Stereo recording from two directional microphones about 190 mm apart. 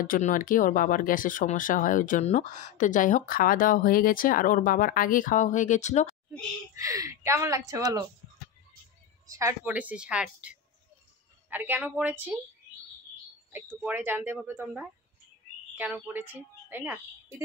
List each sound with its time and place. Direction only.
0.0 s speech: 45° left (ahead or behind)
6.7 s speech: 15° right (ahead or behind)
9.3 s speech: 15° right (ahead or behind)
13.5 s speech: 10° right (ahead or behind)